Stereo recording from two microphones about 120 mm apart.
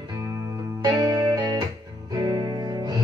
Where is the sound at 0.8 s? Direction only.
35° right (ahead or behind).